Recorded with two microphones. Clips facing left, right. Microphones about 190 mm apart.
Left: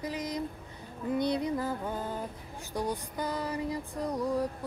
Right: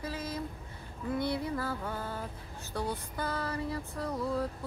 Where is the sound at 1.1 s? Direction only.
20° left (ahead or behind).